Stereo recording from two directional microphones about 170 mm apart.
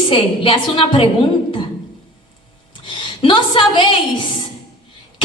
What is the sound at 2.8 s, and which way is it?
Speech, 30° left (ahead or behind).